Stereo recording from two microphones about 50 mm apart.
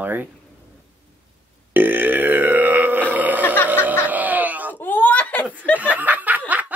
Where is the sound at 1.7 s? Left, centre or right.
Right.